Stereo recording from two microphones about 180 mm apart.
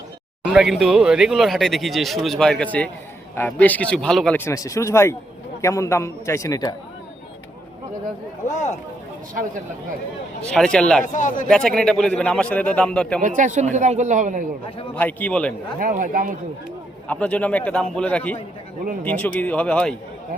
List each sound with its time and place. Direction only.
0.5 s a man's voice: centre (ahead or behind)
4.4 s a man's voice: 15° left (ahead or behind)
10.4 s speech: 5° left (ahead or behind)
11.0 s speech: 45° left (ahead or behind)
11.4 s speech: 5° left (ahead or behind)
13.2 s speech: 45° right (ahead or behind)
14.9 s a man's voice: 10° left (ahead or behind)
15.8 s speech: 50° right (ahead or behind)
17.1 s a man's voice: 5° left (ahead or behind)